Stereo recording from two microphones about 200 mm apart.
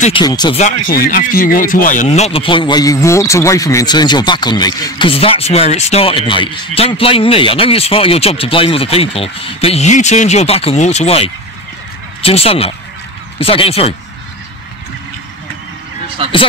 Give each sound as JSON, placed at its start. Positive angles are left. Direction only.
{"t": 0.2, "sound": "speech", "side_deg": 20}
{"t": 0.8, "sound": "speech", "side_deg": 45}
{"t": 16.2, "sound": "speech", "side_deg": -30}